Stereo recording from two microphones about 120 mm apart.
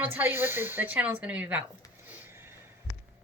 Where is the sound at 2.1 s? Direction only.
20° right (ahead or behind).